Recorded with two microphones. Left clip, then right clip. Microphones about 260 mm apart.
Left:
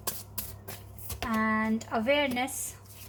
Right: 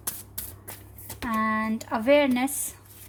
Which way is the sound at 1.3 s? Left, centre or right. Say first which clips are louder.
Right 3 dB; right.